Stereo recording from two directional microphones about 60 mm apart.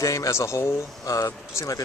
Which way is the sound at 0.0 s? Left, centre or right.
Left.